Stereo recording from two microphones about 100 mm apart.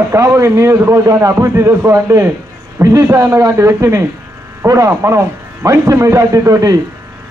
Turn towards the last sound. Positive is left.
turn(degrees=-35)  # may be behind; listen again after turning